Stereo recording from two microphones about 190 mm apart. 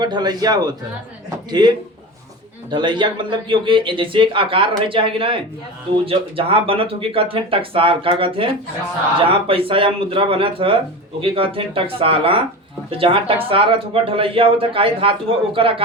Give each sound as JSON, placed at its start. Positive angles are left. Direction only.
{"t": 0.0, "sound": "speech", "side_deg": -20}